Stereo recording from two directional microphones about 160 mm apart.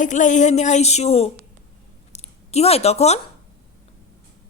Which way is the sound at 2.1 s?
45° left (ahead or behind).